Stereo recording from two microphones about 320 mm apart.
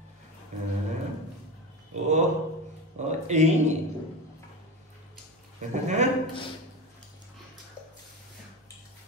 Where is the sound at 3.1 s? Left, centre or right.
Right.